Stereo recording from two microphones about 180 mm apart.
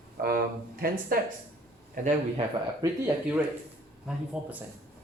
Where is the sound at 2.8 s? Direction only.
20° right (ahead or behind).